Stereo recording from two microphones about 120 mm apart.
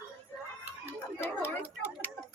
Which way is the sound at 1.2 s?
20° left (ahead or behind).